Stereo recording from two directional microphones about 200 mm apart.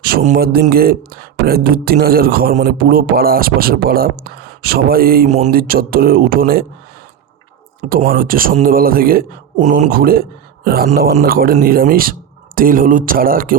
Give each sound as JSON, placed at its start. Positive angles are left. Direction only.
{"t": 0.0, "sound": "a sound", "side_deg": -50}
{"t": 0.3, "sound": "speech", "side_deg": -50}
{"t": 7.8, "sound": "speech", "side_deg": -45}